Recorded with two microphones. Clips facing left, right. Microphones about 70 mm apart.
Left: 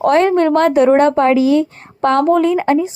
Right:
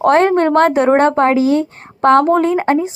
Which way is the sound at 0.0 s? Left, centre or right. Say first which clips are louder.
Right 1 dB; right.